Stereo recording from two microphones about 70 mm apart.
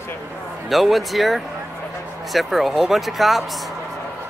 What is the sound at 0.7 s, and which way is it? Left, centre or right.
Speech, centre.